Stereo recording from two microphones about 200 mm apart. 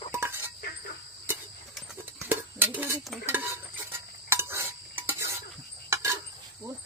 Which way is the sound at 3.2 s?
10° right (ahead or behind).